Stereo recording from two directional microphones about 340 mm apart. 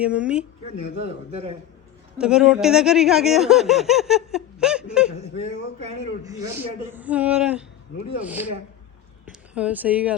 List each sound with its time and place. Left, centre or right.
0.0 s speech: centre
0.9 s a man's voice: centre
2.1 s speech: centre
5.4 s speech: centre
9.6 s speech: centre